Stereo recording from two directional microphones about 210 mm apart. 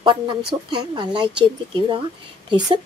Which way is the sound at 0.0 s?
20° right (ahead or behind).